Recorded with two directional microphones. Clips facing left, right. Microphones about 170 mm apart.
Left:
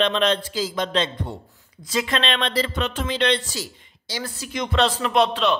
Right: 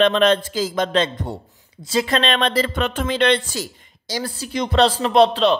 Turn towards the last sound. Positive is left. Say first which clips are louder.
# right 5 dB
turn(degrees=-35)  # may be behind; listen again after turning